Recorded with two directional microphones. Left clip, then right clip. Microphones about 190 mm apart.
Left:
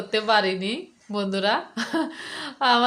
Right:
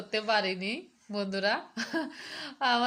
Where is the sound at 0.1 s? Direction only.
Centre (ahead or behind).